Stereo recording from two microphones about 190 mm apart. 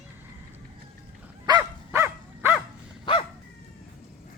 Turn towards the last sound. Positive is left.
turn(degrees=25)  # may be behind; listen again after turning